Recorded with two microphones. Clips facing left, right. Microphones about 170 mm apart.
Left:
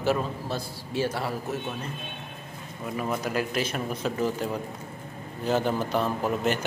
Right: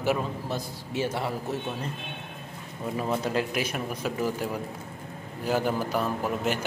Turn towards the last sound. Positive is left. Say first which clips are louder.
# left 2 dB
turn(degrees=-5)  # may be behind; listen again after turning